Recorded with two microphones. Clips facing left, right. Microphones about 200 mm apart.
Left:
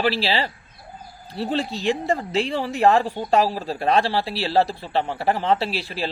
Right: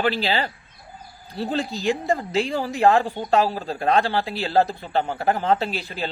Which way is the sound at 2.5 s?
Centre (ahead or behind).